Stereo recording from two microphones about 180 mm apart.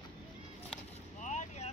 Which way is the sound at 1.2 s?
40° left (ahead or behind).